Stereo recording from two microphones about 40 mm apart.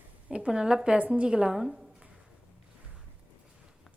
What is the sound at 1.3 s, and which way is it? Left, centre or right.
Speech, right.